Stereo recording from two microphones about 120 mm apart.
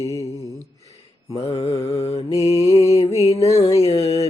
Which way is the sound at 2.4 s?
60° left (ahead or behind).